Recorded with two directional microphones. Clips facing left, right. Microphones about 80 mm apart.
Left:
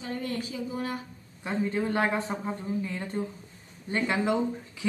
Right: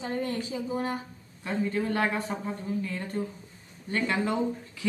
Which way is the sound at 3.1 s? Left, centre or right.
Centre.